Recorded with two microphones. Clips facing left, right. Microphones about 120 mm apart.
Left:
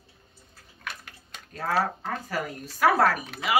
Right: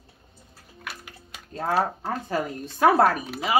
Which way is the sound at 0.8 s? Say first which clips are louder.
Even; 5° right (ahead or behind).